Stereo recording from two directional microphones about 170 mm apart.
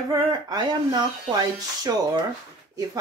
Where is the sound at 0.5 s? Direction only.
25° right (ahead or behind).